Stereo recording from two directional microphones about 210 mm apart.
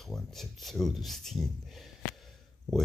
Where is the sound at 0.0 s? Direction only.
Centre (ahead or behind).